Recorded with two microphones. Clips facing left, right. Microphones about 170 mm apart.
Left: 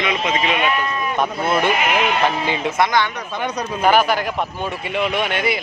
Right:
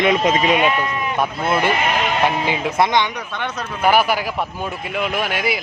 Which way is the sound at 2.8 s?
20° right (ahead or behind).